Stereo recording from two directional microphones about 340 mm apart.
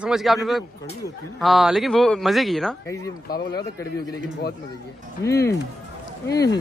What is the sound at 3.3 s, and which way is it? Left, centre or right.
Speech, left.